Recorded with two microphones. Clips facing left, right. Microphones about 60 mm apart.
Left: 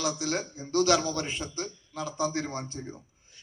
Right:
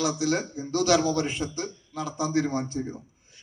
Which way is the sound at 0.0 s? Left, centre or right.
Right.